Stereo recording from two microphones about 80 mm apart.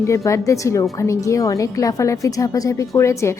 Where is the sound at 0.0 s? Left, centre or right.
Left.